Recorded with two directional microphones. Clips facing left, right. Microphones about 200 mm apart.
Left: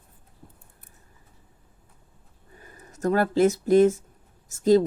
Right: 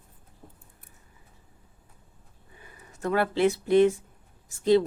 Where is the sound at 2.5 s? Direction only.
40° left (ahead or behind).